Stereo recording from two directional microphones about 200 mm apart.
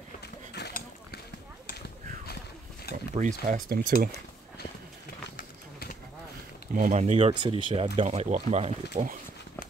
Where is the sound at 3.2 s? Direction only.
40° right (ahead or behind).